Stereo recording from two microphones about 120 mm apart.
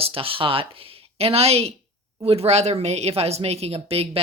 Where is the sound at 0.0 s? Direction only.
50° right (ahead or behind).